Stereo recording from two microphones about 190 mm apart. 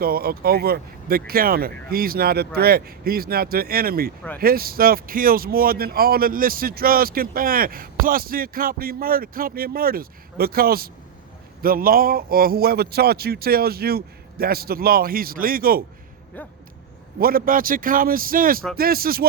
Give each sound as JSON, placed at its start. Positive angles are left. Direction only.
{"t": 0.0, "sound": "speech", "side_deg": -55}
{"t": 17.2, "sound": "speech", "side_deg": -50}